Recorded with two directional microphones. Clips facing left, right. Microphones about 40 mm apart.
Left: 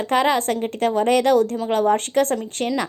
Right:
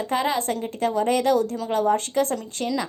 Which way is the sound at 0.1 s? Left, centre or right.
Left.